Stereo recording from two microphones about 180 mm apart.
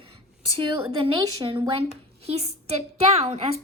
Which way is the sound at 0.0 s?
30° right (ahead or behind).